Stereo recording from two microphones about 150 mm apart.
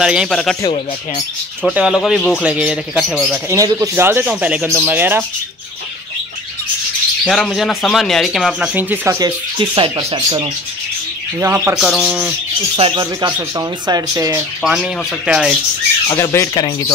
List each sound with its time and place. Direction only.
0.0 s speech: 5° right (ahead or behind)
1.7 s speech: 10° right (ahead or behind)
2.0 s speech: 5° left (ahead or behind)
2.4 s speech: 5° right (ahead or behind)
3.3 s speech: 20° right (ahead or behind)
7.2 s speech: centre (ahead or behind)
9.2 s speech: 30° right (ahead or behind)
11.3 s speech: 15° right (ahead or behind)
11.8 s speech: 5° right (ahead or behind)
12.7 s speech: 40° right (ahead or behind)
13.0 s speech: 25° right (ahead or behind)
14.6 s speech: 5° right (ahead or behind)
16.1 s speech: 20° left (ahead or behind)